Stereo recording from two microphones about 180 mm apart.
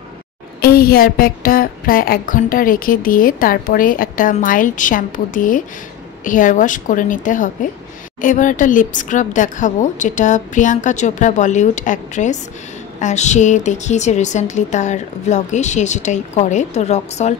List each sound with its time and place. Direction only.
0.6 s a woman's voice: 55° left (ahead or behind); by 17.4 s 40° left (ahead or behind)